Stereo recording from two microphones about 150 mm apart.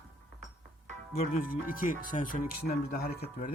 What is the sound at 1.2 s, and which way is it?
Speech, 70° left (ahead or behind).